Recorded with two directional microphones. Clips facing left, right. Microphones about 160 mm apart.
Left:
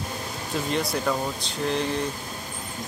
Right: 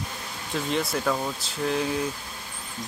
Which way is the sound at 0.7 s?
Centre (ahead or behind).